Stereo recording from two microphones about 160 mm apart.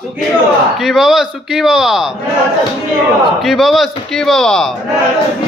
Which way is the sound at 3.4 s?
Centre (ahead or behind).